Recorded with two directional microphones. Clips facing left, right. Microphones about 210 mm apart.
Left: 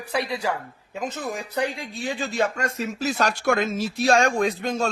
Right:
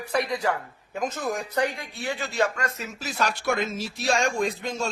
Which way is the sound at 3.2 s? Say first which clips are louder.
Left 2 dB; 50° left (ahead or behind).